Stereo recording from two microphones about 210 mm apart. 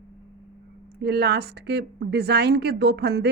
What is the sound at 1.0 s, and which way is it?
Speech, 50° right (ahead or behind).